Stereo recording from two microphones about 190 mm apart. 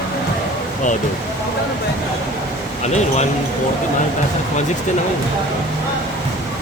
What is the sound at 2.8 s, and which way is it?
Speech, 35° left (ahead or behind).